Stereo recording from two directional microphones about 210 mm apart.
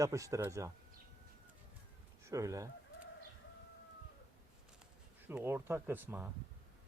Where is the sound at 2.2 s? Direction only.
15° right (ahead or behind).